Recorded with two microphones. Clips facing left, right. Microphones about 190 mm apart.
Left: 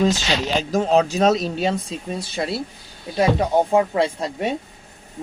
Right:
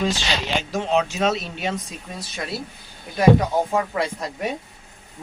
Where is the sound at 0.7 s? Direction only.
40° left (ahead or behind).